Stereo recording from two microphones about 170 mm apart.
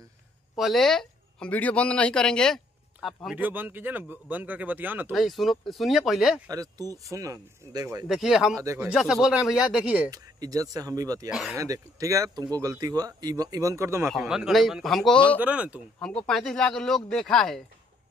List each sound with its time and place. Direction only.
0.6 s speech: centre (ahead or behind)
5.1 s speech: centre (ahead or behind)
6.5 s speech: 20° right (ahead or behind)
8.1 s speech: centre (ahead or behind)
8.5 s speech: 20° right (ahead or behind)
8.8 s speech: 5° right (ahead or behind)
10.1 s speech: 20° right (ahead or behind)
11.2 s speech: centre (ahead or behind)
11.5 s speech: 20° right (ahead or behind)
14.1 s speech: 5° right (ahead or behind)
15.3 s speech: 10° right (ahead or behind)
16.0 s speech: 5° left (ahead or behind)